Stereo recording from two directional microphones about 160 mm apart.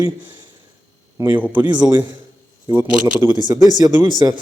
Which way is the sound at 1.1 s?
15° right (ahead or behind).